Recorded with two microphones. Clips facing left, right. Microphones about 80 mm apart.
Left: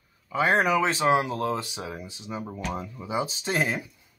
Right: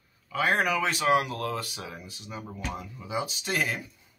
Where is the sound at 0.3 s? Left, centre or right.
Left.